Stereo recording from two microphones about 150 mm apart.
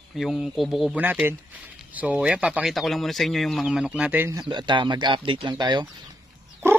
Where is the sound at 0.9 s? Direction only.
10° right (ahead or behind).